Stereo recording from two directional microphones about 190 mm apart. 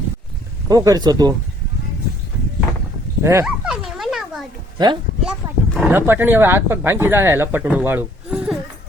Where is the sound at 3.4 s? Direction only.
5° right (ahead or behind).